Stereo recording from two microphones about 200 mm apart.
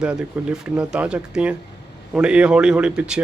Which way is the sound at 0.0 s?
5° right (ahead or behind).